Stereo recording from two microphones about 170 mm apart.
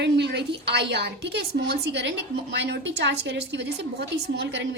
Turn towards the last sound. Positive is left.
turn(degrees=-85)